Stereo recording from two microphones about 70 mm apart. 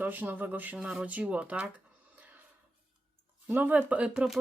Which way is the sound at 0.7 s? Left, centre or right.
Centre.